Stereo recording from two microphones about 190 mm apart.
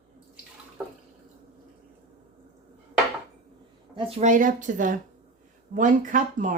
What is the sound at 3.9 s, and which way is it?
Speech, 30° right (ahead or behind).